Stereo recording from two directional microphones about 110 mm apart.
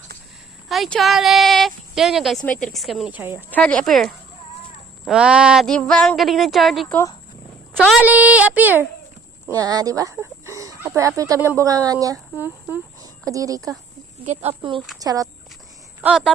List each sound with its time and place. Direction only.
0.7 s speech: centre (ahead or behind)
2.4 s speech: 10° left (ahead or behind)
3.1 s speech: 15° right (ahead or behind)
3.5 s speech: 10° left (ahead or behind)
5.0 s speech: 10° right (ahead or behind)
5.6 s speech: 5° left (ahead or behind)
7.9 s speech: 10° right (ahead or behind)
9.6 s speech: 35° right (ahead or behind)
12.4 s speech: 15° right (ahead or behind)
13.0 s speech: 30° right (ahead or behind)
14.6 s a woman's voice: 50° right (ahead or behind)
14.9 s speech: 35° right (ahead or behind)